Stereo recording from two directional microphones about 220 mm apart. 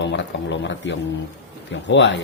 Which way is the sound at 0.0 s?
55° left (ahead or behind).